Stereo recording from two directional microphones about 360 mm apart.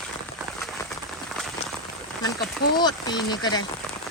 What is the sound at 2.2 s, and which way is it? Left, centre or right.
Speech, left.